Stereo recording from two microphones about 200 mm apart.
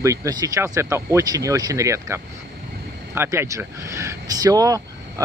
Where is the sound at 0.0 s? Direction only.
15° right (ahead or behind).